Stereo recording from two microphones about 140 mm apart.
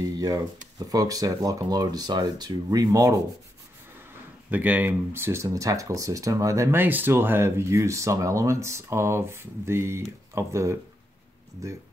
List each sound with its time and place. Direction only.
0.0 s a sound: 25° right (ahead or behind)
0.7 s speech: 25° right (ahead or behind)
4.5 s speech: 10° right (ahead or behind)